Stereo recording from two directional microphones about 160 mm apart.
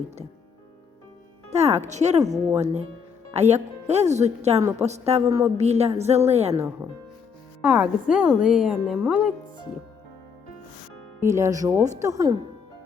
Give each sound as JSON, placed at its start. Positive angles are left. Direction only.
{"t": 1.5, "sound": "speech", "side_deg": -40}
{"t": 2.2, "sound": "speech", "side_deg": -20}
{"t": 3.3, "sound": "a woman's voice", "side_deg": -45}
{"t": 7.6, "sound": "a woman's voice", "side_deg": -5}
{"t": 11.2, "sound": "speech", "side_deg": -20}